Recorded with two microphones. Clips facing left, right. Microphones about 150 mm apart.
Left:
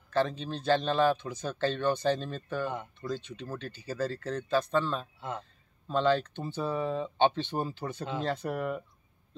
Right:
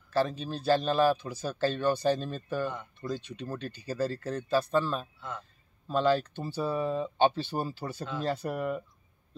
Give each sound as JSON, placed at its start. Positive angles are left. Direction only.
{"t": 0.1, "sound": "speech", "side_deg": -10}
{"t": 2.6, "sound": "speech", "side_deg": 20}
{"t": 3.1, "sound": "speech", "side_deg": -15}